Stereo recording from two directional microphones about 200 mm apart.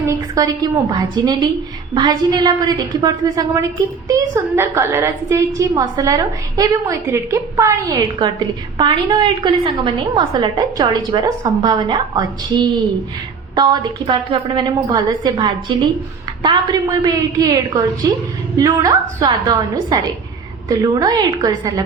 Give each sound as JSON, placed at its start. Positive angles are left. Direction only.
{"t": 0.0, "sound": "a woman's voice", "side_deg": -15}